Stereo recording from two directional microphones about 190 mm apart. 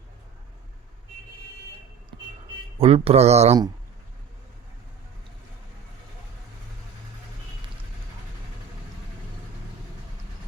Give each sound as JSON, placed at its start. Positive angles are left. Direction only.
{"t": 2.7, "sound": "speech", "side_deg": -30}